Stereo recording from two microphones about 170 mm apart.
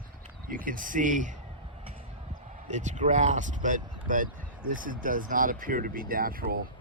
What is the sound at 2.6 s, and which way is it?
Speech, 45° right (ahead or behind).